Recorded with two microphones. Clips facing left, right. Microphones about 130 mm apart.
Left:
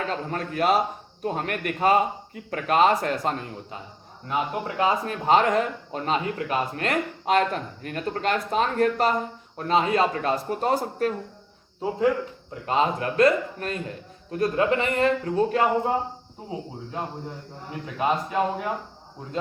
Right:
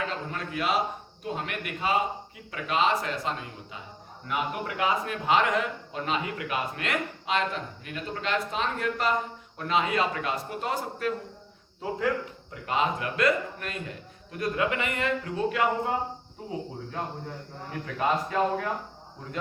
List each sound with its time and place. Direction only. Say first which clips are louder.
0.3 s a man's voice: left 9 dB; 45° left (ahead or behind)
4.3 s speech: left 3 dB; 30° left (ahead or behind)
11.8 s a man's voice: left 5 dB; 25° left (ahead or behind)
16.9 s a man's voice: left 4 dB; 20° left (ahead or behind)